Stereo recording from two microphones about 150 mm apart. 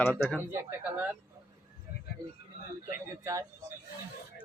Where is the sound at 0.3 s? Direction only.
10° right (ahead or behind).